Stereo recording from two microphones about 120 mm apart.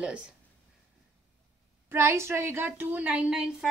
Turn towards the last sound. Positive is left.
turn(degrees=-5)  # may be behind; listen again after turning